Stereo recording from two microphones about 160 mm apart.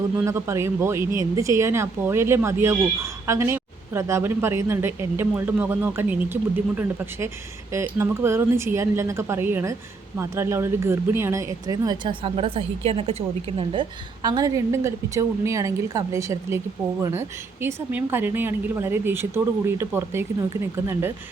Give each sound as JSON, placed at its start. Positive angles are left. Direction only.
{"t": 0.2, "sound": "speech", "side_deg": -15}
{"t": 14.2, "sound": "speech", "side_deg": -25}